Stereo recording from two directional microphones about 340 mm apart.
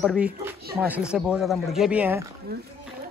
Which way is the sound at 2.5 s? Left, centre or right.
Right.